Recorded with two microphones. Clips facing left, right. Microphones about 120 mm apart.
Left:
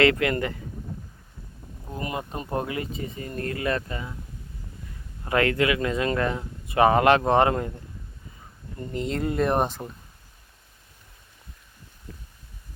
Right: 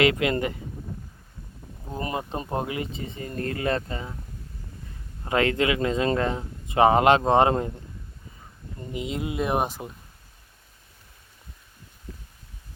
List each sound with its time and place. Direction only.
0.0 s speech: 20° right (ahead or behind)
1.9 s speech: 30° right (ahead or behind)
5.2 s speech: 25° right (ahead or behind)
8.9 s speech: 5° right (ahead or behind)